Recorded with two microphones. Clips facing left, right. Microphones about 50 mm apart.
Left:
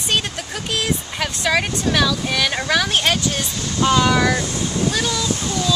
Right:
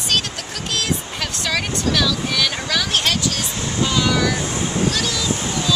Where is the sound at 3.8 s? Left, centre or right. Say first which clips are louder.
Left 5 dB; left.